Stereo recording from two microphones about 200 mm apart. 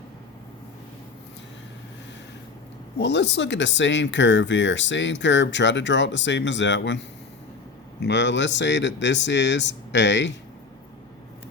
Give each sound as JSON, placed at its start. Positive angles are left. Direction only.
{"t": 3.0, "sound": "speech", "side_deg": 60}
{"t": 8.0, "sound": "speech", "side_deg": 60}